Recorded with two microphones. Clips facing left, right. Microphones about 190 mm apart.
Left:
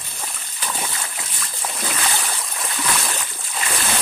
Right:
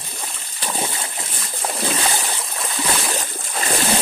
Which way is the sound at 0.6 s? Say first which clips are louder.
Right 3 dB; 30° right (ahead or behind).